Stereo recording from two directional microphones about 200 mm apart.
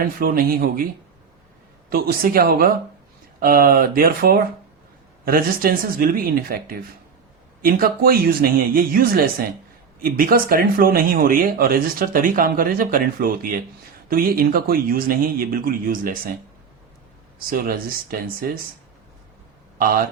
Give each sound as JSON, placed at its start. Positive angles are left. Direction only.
{"t": 0.0, "sound": "speech", "side_deg": -45}
{"t": 1.9, "sound": "speech", "side_deg": -50}
{"t": 17.5, "sound": "speech", "side_deg": -45}
{"t": 19.8, "sound": "speech", "side_deg": -45}